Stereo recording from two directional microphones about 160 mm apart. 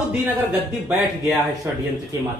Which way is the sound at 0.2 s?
5° right (ahead or behind).